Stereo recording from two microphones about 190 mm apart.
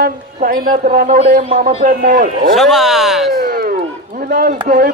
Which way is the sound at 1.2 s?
35° right (ahead or behind).